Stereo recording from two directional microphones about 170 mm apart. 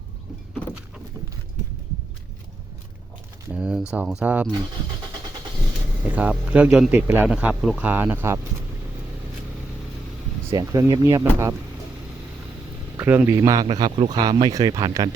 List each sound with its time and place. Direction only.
3.5 s a man's voice: 5° right (ahead or behind)
6.1 s a man's voice: 10° right (ahead or behind)
10.5 s speech: 20° right (ahead or behind)
13.0 s speech: 15° right (ahead or behind)